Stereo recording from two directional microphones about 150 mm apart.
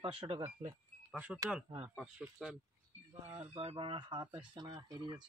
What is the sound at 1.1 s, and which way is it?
Speech, 10° right (ahead or behind).